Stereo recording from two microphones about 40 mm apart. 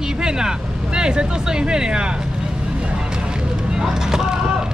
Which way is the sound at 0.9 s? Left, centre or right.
Right.